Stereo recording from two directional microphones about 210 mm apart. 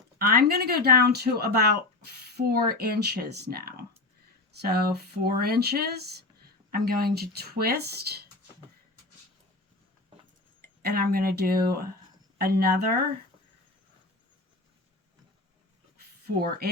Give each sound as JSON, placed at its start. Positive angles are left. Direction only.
{"t": 0.2, "sound": "speech", "side_deg": -45}
{"t": 10.6, "sound": "speech", "side_deg": -45}